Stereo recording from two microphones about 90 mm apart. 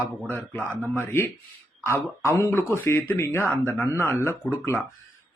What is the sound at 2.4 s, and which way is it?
A man's voice, 30° left (ahead or behind).